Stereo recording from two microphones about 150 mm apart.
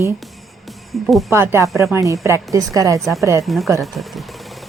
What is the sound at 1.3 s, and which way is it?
A woman's voice, 20° right (ahead or behind).